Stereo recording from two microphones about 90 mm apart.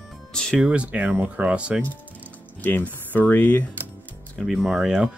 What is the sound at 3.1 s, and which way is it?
Speech, 20° left (ahead or behind).